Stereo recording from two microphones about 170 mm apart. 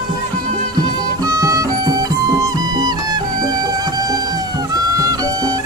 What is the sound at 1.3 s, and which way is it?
Music, 20° right (ahead or behind).